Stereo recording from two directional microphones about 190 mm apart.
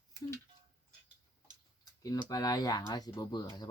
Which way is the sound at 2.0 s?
20° left (ahead or behind).